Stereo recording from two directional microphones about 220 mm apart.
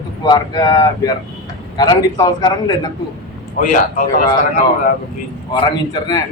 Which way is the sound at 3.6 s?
35° left (ahead or behind).